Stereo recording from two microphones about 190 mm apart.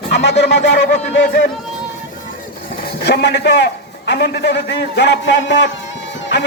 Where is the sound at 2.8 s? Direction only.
60° left (ahead or behind).